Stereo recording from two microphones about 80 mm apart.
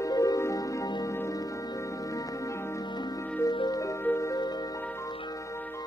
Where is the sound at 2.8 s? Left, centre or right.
Left.